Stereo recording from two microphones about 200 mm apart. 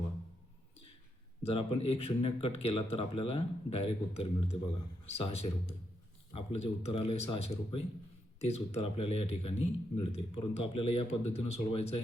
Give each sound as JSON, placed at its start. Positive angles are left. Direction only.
{"t": 1.4, "sound": "a man's voice", "side_deg": 30}